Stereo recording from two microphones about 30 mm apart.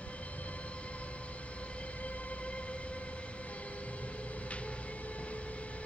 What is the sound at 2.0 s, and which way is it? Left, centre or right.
Train, left.